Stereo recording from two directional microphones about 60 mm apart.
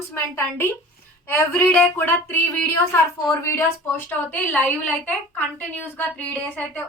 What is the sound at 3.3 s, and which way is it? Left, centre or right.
Speech, left.